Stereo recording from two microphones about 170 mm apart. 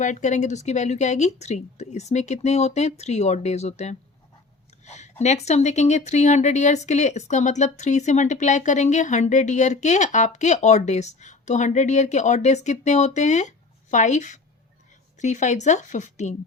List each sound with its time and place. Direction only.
0.0 s speech: 45° left (ahead or behind)
4.9 s a sound: 40° left (ahead or behind)
5.2 s speech: 40° left (ahead or behind)